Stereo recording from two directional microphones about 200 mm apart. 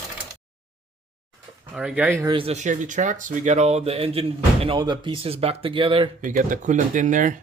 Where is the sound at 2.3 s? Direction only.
25° right (ahead or behind).